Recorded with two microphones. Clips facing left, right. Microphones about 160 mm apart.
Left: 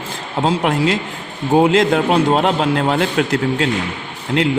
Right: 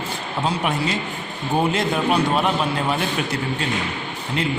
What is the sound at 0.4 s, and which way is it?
A man's voice, 90° left.